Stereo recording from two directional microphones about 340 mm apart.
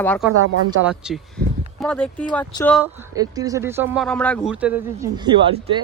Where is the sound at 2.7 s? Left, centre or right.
Centre.